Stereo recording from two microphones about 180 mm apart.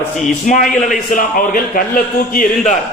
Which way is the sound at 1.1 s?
50° left (ahead or behind).